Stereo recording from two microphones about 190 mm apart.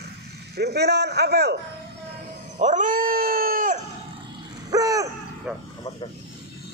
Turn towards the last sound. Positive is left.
turn(degrees=-10)  # may be behind; listen again after turning